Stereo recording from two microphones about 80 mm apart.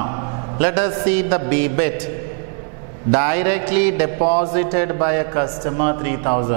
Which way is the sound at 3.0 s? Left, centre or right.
Centre.